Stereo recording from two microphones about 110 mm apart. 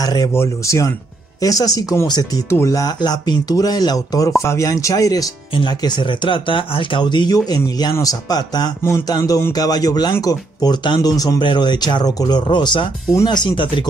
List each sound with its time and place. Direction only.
0.0 s speech: 35° left (ahead or behind)
0.3 s speech: 25° left (ahead or behind)
5.5 s speech: 45° left (ahead or behind)